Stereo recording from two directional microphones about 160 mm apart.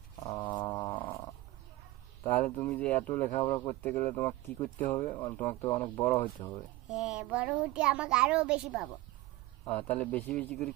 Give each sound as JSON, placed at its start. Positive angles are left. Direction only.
{"t": 0.2, "sound": "a sound", "side_deg": 25}
{"t": 2.2, "sound": "speech", "side_deg": 15}
{"t": 6.8, "sound": "a child's voice", "side_deg": -5}
{"t": 9.6, "sound": "speech", "side_deg": 10}